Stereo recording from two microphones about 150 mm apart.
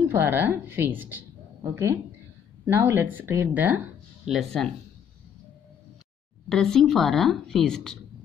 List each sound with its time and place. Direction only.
0.1 s speech: 15° right (ahead or behind)
4.3 s a woman's voice: centre (ahead or behind)
6.5 s a woman's voice: 5° left (ahead or behind)